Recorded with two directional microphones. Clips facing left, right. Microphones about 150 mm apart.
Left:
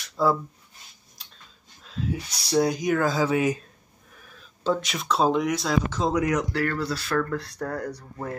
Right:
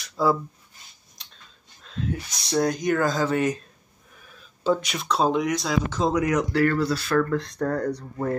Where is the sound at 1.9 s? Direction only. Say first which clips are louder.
Even; 5° left (ahead or behind).